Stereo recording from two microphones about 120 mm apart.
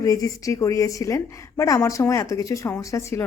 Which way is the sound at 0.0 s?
30° left (ahead or behind).